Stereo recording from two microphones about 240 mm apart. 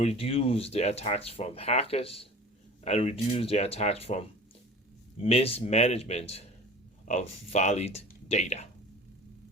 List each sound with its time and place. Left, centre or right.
0.0 s speech: left